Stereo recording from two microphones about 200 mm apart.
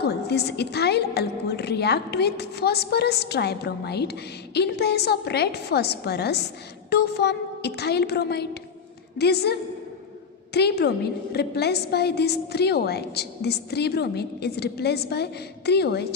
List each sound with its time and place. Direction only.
0.0 s a woman's voice: 55° left (ahead or behind)